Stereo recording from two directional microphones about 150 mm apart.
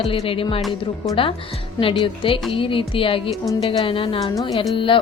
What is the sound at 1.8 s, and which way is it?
Speech, 35° left (ahead or behind).